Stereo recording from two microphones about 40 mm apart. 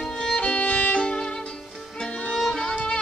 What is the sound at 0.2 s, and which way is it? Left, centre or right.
Music, left.